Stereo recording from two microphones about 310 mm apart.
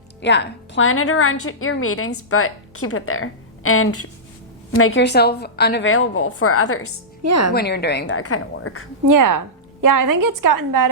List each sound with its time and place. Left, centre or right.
0.2 s a woman's voice: left
7.2 s a woman's voice: right
7.5 s a woman's voice: left
8.2 s a woman's voice: left
9.0 s a woman's voice: right